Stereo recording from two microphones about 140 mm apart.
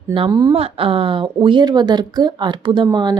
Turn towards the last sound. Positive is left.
turn(degrees=-30)  # may be behind; listen again after turning